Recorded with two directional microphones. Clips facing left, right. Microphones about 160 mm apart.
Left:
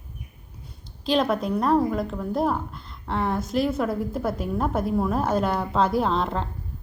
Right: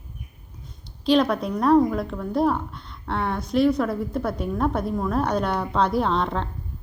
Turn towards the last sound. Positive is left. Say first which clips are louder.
# right 1 dB
turn(degrees=5)  # may be behind; listen again after turning